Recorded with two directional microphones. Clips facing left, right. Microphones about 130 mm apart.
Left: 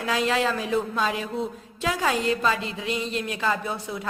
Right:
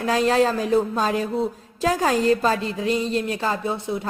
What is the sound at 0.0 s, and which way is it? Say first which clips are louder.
A woman's voice: right 5 dB; 40° right (ahead or behind).